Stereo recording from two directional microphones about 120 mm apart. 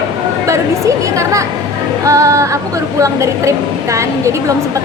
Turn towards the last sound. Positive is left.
turn(degrees=-25)  # may be behind; listen again after turning